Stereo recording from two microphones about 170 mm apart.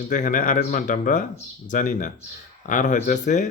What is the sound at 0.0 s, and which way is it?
Speech, 50° left (ahead or behind).